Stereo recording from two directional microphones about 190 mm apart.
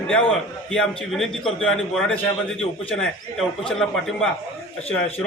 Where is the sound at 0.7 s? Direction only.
5° left (ahead or behind).